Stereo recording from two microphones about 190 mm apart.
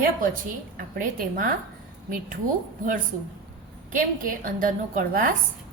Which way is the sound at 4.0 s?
45° right (ahead or behind).